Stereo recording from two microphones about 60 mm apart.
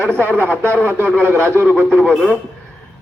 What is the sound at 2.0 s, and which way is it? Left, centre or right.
Speech, centre.